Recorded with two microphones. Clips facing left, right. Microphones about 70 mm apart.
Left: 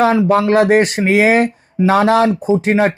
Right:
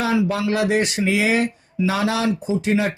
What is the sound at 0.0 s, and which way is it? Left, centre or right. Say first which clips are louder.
Speech: left 8 dB; left.